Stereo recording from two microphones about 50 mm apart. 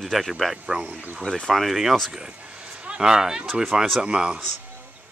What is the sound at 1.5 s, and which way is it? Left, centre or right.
Speech, centre.